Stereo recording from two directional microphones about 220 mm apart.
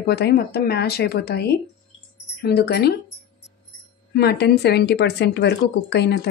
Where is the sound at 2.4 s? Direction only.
45° left (ahead or behind).